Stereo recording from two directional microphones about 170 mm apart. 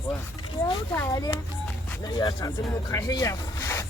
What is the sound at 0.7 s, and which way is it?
Speech, 20° left (ahead or behind).